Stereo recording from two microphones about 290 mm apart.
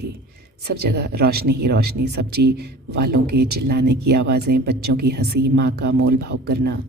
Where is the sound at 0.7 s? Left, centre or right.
Right.